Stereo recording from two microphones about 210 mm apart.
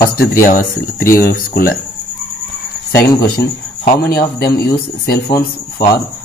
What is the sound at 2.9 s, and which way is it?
Speech, 50° left (ahead or behind).